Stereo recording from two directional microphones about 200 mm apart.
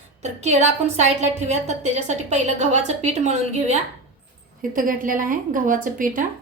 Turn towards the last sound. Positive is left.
turn(degrees=-40)  # may be behind; listen again after turning